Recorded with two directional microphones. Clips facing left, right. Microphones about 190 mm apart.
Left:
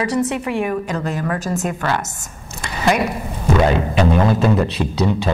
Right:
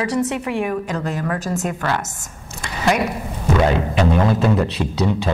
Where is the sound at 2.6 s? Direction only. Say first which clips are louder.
Left 1 dB; 15° left (ahead or behind).